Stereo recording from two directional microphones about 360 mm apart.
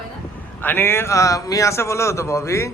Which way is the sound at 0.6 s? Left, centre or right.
Centre.